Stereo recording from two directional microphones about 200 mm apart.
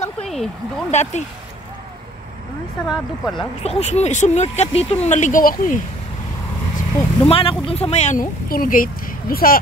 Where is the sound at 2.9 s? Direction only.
Centre (ahead or behind).